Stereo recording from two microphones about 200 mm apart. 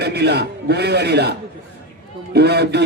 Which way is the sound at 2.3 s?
55° right (ahead or behind).